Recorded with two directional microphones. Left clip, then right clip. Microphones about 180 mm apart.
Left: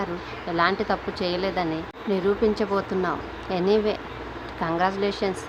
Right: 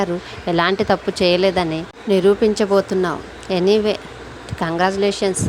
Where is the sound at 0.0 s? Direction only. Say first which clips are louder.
Right 8 dB; 45° right (ahead or behind).